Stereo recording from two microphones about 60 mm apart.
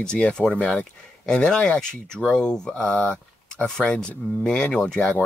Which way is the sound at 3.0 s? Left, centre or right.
Left.